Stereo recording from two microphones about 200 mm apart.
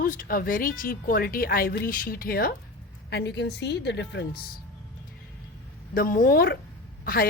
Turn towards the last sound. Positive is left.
turn(degrees=50)  # may be behind; listen again after turning